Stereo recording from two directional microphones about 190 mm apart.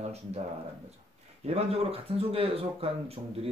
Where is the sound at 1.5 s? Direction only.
30° right (ahead or behind).